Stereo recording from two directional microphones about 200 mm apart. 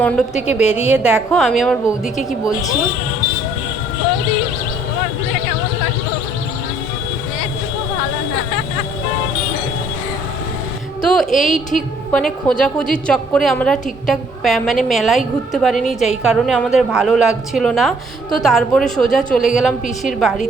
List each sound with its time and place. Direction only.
0.4 s a woman's voice: 5° right (ahead or behind)
2.4 s speech: 15° left (ahead or behind)
11.0 s a sound: 5° left (ahead or behind)
11.4 s a woman's voice: 40° left (ahead or behind)
12.1 s a woman's voice: 5° left (ahead or behind)